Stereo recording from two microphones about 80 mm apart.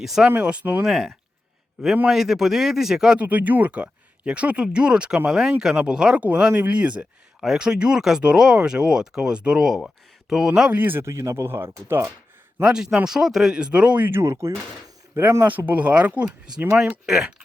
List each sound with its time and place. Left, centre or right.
0.0 s speech: centre
0.3 s speech: centre
0.9 s speech: centre
3.2 s speech: centre
10.7 s speech: right
12.6 s speech: centre
14.1 s speech: right
15.4 s speech: right; by 17.3 s centre